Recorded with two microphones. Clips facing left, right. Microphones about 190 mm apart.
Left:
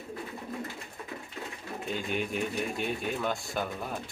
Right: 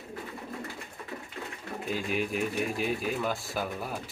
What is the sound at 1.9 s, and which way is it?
Speech, centre (ahead or behind).